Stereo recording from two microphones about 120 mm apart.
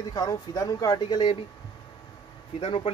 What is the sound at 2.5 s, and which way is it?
Speech, 50° left (ahead or behind).